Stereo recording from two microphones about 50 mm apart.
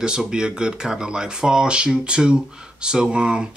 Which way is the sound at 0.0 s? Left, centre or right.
Centre.